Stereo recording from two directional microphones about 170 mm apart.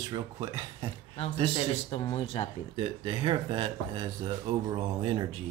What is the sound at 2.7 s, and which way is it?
Speech, 35° right (ahead or behind).